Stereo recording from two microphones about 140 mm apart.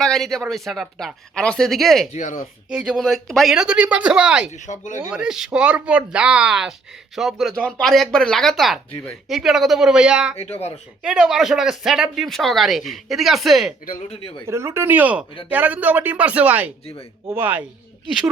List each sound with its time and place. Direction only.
0.0 s speech: 5° left (ahead or behind)
2.1 s speech: 65° left (ahead or behind)
2.6 s speech: 5° right (ahead or behind)
4.5 s speech: 60° left (ahead or behind)
5.1 s speech: 5° right (ahead or behind)
10.3 s speech: 50° left (ahead or behind)
11.0 s speech: 5° right (ahead or behind)
14.1 s speech: 40° left (ahead or behind)
14.4 s speech: 20° right (ahead or behind)